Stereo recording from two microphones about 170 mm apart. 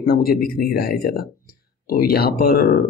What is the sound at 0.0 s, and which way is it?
Speech, 60° left (ahead or behind).